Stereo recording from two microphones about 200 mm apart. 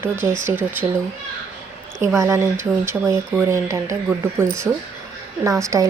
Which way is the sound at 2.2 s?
15° right (ahead or behind).